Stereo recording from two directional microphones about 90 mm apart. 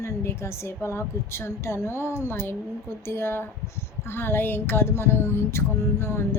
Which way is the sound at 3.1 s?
25° left (ahead or behind).